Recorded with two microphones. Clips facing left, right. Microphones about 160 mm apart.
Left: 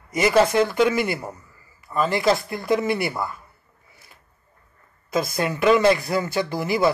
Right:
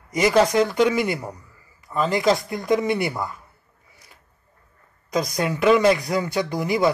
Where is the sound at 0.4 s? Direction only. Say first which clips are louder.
Even; 15° right (ahead or behind).